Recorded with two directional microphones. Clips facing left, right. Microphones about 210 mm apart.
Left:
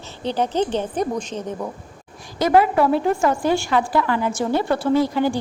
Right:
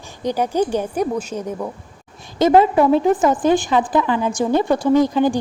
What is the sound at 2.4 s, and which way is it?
Speech, 25° right (ahead or behind).